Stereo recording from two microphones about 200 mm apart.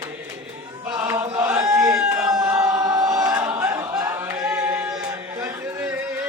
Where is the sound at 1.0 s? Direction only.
15° right (ahead or behind).